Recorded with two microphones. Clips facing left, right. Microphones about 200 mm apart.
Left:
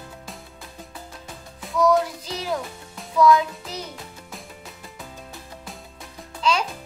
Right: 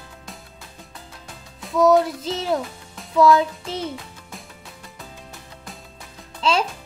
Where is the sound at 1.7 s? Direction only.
25° right (ahead or behind).